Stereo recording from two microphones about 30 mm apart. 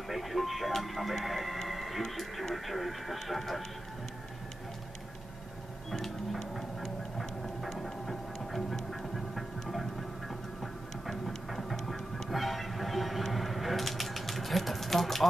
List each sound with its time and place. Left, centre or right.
0.1 s speech: centre
1.7 s music: centre
2.5 s speech: centre
5.9 s speech: centre
6.5 s a sound: centre
11.7 s music: centre
13.3 s typewriter: centre